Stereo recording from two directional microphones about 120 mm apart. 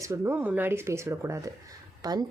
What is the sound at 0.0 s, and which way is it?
A woman's voice, 25° right (ahead or behind).